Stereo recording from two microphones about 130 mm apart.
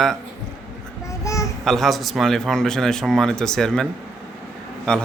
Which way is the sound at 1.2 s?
25° left (ahead or behind).